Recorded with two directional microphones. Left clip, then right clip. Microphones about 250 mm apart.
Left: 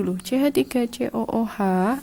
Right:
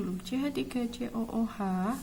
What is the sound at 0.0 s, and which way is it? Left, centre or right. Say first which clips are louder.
Speech: left 12 dB; left.